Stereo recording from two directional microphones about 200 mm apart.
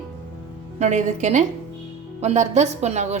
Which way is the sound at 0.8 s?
35° right (ahead or behind).